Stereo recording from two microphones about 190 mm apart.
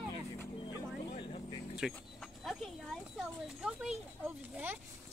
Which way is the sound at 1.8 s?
Centre (ahead or behind).